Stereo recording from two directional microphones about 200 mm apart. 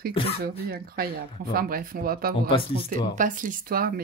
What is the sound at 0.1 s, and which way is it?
Speech, 25° left (ahead or behind).